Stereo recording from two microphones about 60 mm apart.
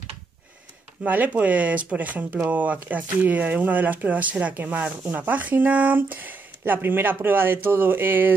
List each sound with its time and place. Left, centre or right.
1.0 s speech: right